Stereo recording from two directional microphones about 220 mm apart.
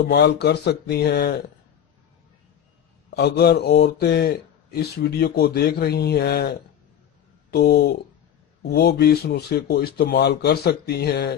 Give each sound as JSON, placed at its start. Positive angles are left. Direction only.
{"t": 0.0, "sound": "speech", "side_deg": 50}
{"t": 3.2, "sound": "speech", "side_deg": 50}